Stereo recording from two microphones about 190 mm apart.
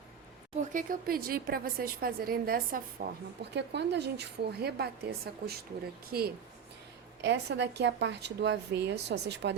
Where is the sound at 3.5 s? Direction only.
60° right (ahead or behind).